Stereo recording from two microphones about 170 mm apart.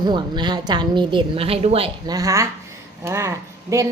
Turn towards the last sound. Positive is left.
turn(degrees=-15)  # may be behind; listen again after turning